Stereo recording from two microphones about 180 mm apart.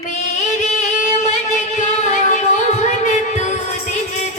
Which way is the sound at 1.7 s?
40° left (ahead or behind).